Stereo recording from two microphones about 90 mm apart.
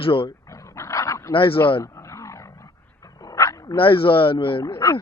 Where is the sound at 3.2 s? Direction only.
35° left (ahead or behind).